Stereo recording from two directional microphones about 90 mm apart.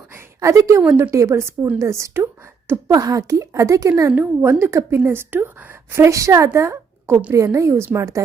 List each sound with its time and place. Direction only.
0.3 s a woman's voice: 35° right (ahead or behind)
4.1 s a woman's voice: 20° right (ahead or behind); by 8.2 s 35° right (ahead or behind)